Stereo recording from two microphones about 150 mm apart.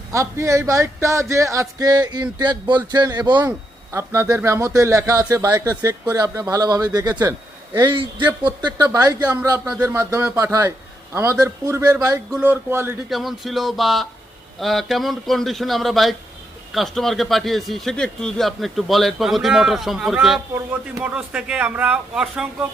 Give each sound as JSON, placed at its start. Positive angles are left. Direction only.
{"t": 0.1, "sound": "speech", "side_deg": -20}
{"t": 9.7, "sound": "a man's voice", "side_deg": -10}
{"t": 10.0, "sound": "speech", "side_deg": -20}
{"t": 12.3, "sound": "a man's voice", "side_deg": -10}
{"t": 13.1, "sound": "a man's voice", "side_deg": 0}